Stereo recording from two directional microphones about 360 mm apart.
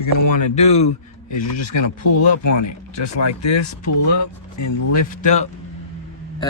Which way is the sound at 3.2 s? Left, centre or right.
Left.